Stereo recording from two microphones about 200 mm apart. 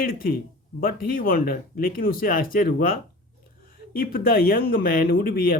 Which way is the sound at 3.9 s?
45° left (ahead or behind).